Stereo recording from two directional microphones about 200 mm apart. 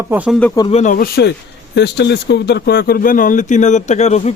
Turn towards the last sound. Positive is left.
turn(degrees=35)  # may be behind; listen again after turning